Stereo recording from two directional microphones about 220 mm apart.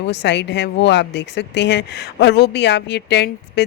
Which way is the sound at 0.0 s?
50° left (ahead or behind).